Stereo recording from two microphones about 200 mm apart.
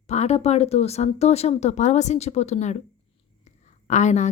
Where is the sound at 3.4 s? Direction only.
35° left (ahead or behind).